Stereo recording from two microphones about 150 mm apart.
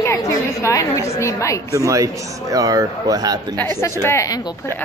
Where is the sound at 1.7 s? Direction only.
20° right (ahead or behind).